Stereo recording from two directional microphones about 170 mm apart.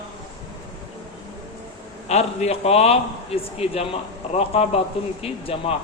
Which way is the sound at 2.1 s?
40° left (ahead or behind).